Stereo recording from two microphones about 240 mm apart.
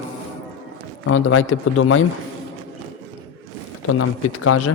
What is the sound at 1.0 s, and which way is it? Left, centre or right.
Speech, left.